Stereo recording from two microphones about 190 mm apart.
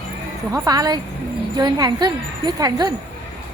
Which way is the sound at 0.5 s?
20° right (ahead or behind).